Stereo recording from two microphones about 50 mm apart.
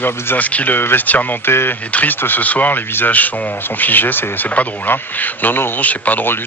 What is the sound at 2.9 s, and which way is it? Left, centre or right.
Speech, left.